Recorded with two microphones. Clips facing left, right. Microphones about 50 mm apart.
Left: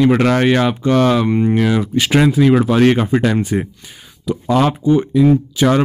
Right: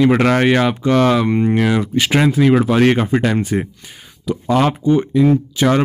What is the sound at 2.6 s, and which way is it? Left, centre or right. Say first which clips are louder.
Speech: left 1 dB; right.